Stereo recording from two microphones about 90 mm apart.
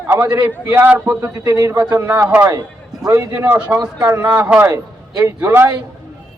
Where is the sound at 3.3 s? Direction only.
25° right (ahead or behind).